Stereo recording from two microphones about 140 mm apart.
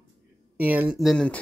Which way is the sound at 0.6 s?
10° right (ahead or behind).